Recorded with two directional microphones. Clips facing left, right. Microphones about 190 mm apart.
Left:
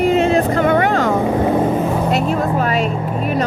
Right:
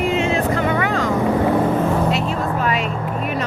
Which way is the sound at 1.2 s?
20° left (ahead or behind).